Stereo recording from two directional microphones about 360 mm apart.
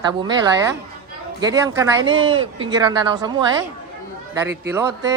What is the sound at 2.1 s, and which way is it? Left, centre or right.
Speech, right.